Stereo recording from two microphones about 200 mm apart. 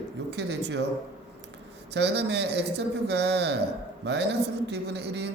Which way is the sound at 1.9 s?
60° right (ahead or behind).